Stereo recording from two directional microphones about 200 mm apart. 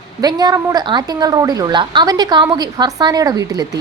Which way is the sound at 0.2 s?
20° right (ahead or behind).